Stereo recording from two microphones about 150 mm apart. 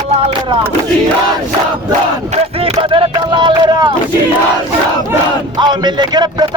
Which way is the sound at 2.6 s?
40° right (ahead or behind).